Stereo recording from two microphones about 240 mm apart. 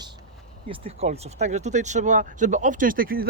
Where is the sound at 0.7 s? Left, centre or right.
Right.